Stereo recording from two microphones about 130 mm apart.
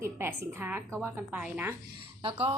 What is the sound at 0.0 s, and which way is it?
A woman's voice, 15° right (ahead or behind).